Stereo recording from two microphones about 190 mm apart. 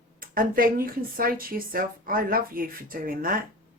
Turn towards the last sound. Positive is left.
turn(degrees=-50)  # may be behind; listen again after turning